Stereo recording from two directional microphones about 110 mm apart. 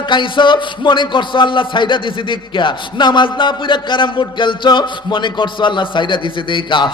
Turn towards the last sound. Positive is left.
turn(degrees=45)  # may be behind; listen again after turning